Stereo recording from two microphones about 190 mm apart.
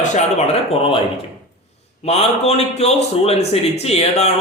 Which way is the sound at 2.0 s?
35° left (ahead or behind).